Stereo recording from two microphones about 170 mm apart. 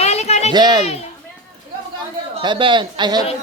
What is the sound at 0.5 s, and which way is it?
Speech, 25° right (ahead or behind).